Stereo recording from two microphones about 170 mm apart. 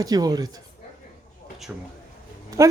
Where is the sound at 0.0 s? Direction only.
20° right (ahead or behind).